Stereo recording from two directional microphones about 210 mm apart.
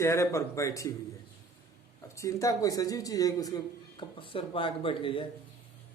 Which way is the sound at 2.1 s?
15° left (ahead or behind).